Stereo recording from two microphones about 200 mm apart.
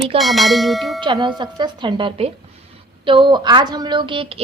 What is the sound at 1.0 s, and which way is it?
A woman's voice, 25° right (ahead or behind).